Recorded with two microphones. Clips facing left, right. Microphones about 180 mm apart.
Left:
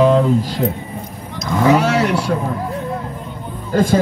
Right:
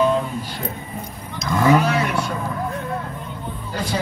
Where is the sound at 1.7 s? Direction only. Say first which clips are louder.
Left 4 dB; 80° left.